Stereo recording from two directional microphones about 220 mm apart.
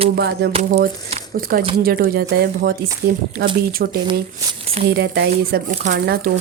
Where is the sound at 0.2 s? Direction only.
45° right (ahead or behind).